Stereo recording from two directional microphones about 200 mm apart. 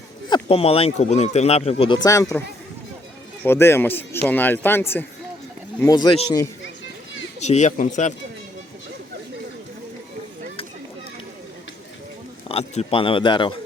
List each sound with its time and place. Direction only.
0.3 s speech: 25° left (ahead or behind)
3.4 s speech: 10° left (ahead or behind)
7.3 s speech: 35° left (ahead or behind)
12.5 s speech: 30° left (ahead or behind)